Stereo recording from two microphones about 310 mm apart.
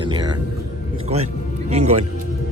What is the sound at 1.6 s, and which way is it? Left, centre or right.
Speech, right.